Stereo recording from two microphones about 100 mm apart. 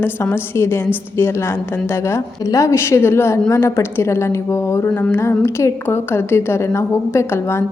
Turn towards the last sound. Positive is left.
turn(degrees=25)  # may be behind; listen again after turning